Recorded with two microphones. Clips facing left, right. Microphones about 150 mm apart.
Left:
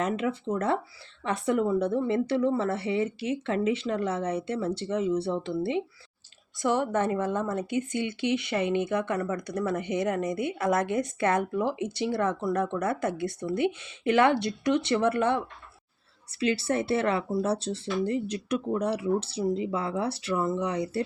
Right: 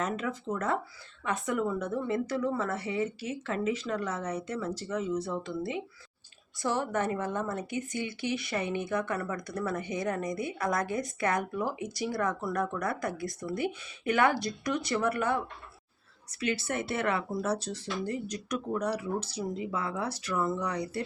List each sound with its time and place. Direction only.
0.0 s a woman's voice: 30° left (ahead or behind)
16.4 s speech: 30° left (ahead or behind)